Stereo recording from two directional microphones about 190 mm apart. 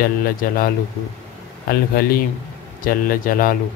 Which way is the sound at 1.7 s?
50° left (ahead or behind).